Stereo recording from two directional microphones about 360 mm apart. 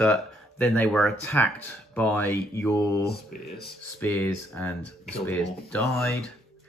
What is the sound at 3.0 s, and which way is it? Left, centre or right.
Speech, left.